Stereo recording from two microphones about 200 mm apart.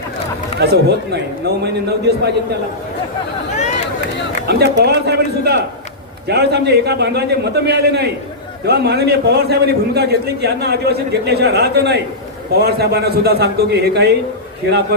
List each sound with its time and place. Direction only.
0.6 s a man's voice: 55° right (ahead or behind)
4.3 s a man's voice: 55° right (ahead or behind)